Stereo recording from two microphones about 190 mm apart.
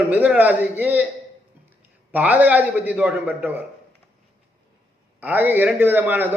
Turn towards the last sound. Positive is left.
turn(degrees=-10)  # may be behind; listen again after turning